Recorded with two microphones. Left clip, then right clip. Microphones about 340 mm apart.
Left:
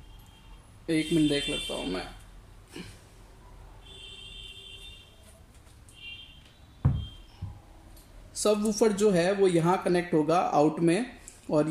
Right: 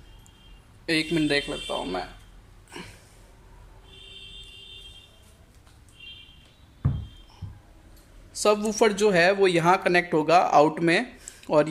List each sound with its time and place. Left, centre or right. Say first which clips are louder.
0.8 s speech: right 2 dB; right
8.3 s speech: right 4 dB; right
11.5 s speech: right 5 dB; right